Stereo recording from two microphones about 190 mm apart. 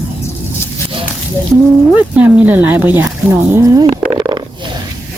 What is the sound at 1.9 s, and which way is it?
A woman's voice, 5° right (ahead or behind).